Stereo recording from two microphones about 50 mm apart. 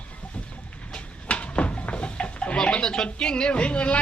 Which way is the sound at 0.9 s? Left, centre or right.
Left.